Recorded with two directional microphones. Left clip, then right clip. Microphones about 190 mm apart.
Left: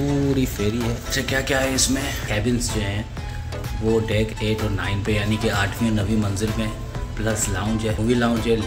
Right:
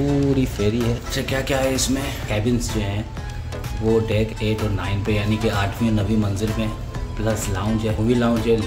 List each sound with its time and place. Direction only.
0.4 s speech: 15° right (ahead or behind)
1.2 s speech: 5° right (ahead or behind)